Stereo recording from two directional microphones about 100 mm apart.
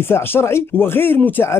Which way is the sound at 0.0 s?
25° left (ahead or behind).